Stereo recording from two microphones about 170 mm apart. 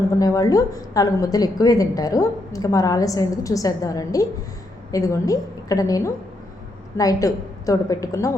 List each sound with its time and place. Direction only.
0.2 s a woman's voice: 20° left (ahead or behind)